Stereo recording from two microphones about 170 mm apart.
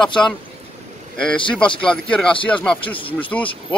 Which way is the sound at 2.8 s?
30° left (ahead or behind).